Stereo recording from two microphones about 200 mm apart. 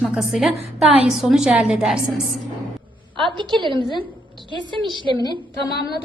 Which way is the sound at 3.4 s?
25° right (ahead or behind).